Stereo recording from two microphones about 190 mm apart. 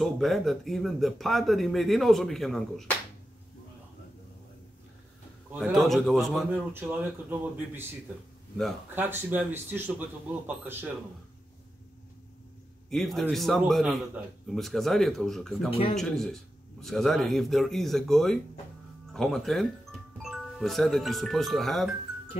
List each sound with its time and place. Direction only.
0.0 s speech: centre (ahead or behind)
5.5 s speech: centre (ahead or behind)
6.7 s speech: 10° right (ahead or behind)
8.9 s speech: 10° right (ahead or behind)
12.9 s speech: centre (ahead or behind)
15.7 s speech: 30° left (ahead or behind)
16.0 s speech: centre (ahead or behind)